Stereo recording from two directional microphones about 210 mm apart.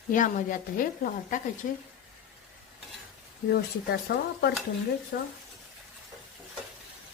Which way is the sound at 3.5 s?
50° left (ahead or behind).